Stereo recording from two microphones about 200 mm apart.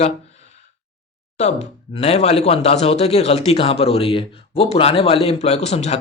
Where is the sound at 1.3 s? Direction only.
35° left (ahead or behind).